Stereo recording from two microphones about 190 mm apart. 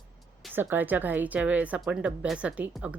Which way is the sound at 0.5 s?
10° right (ahead or behind).